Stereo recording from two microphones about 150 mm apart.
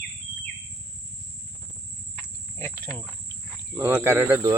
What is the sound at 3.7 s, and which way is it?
Speech, 15° right (ahead or behind).